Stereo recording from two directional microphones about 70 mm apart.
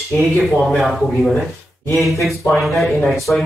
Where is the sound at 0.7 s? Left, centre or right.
Centre.